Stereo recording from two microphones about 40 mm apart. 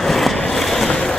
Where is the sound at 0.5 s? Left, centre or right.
Centre.